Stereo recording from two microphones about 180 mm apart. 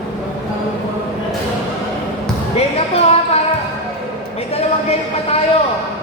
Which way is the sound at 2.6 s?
35° left (ahead or behind).